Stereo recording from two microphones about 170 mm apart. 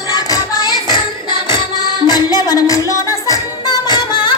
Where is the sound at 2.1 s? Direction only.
20° left (ahead or behind).